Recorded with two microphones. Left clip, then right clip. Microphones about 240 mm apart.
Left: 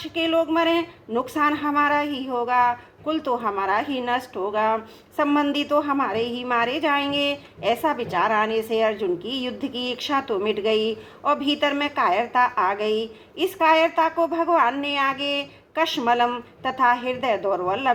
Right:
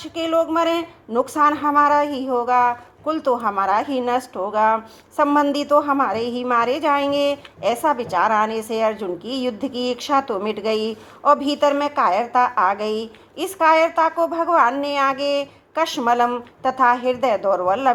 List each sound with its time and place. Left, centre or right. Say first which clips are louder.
0.0 s speech: right 2 dB; right